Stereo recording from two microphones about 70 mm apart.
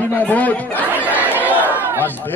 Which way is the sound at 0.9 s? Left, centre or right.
Right.